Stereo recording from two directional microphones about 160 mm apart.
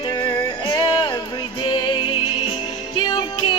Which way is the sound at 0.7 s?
25° left (ahead or behind).